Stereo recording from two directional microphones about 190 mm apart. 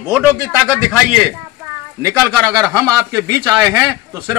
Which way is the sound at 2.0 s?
15° right (ahead or behind).